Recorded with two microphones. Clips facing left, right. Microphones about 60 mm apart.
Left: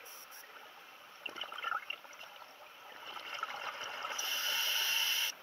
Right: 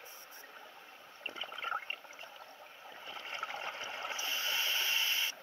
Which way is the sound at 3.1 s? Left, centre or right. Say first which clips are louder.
Even; right.